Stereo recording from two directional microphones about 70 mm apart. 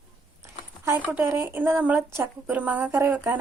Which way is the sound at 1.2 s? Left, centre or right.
Right.